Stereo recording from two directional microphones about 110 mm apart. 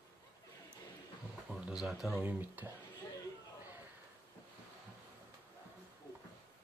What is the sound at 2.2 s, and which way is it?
Speech, 15° right (ahead or behind).